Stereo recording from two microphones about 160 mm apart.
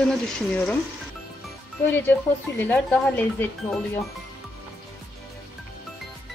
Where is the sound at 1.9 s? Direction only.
10° left (ahead or behind).